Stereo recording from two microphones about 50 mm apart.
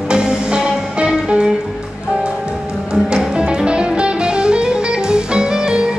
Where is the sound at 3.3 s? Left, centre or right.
Right.